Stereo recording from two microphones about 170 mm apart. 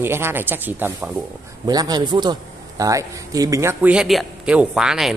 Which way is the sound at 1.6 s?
20° right (ahead or behind).